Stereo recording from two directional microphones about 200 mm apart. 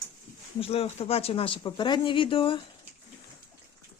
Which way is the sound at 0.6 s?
30° left (ahead or behind).